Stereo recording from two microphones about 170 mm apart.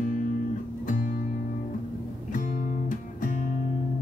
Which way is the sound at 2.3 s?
50° left (ahead or behind).